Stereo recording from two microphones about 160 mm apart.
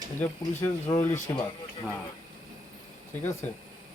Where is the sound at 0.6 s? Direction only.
15° left (ahead or behind).